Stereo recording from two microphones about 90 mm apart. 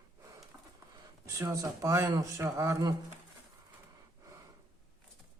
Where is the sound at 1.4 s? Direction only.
35° right (ahead or behind).